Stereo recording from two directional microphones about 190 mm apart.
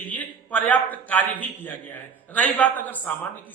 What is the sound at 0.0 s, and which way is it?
A man's voice, 10° left (ahead or behind).